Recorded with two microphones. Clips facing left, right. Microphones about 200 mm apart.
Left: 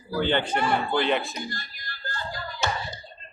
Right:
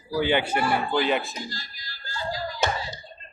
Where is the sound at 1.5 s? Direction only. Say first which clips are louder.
Left 2 dB; 55° left (ahead or behind).